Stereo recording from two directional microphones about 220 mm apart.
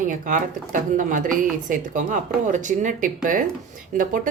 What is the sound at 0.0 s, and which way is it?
A woman's voice, 35° right (ahead or behind).